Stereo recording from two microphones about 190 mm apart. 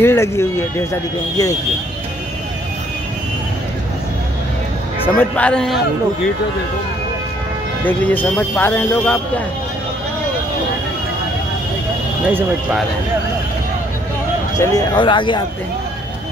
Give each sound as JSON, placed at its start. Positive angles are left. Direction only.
{"t": 0.0, "sound": "speech", "side_deg": 15}
{"t": 5.0, "sound": "speech", "side_deg": 5}
{"t": 7.8, "sound": "speech", "side_deg": 10}
{"t": 12.3, "sound": "speech", "side_deg": -10}
{"t": 14.6, "sound": "speech", "side_deg": 20}